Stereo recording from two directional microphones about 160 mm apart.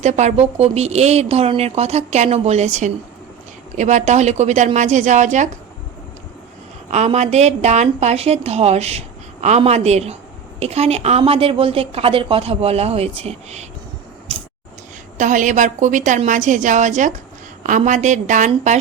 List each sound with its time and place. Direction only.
0.0 s speech: 45° right (ahead or behind)
6.9 s a woman's voice: 45° right (ahead or behind)
15.2 s speech: 50° right (ahead or behind)